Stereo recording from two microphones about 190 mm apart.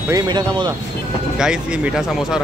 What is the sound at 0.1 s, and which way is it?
Speech, 20° right (ahead or behind).